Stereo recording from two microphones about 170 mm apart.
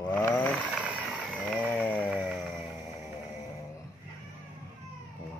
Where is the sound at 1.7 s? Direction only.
10° left (ahead or behind).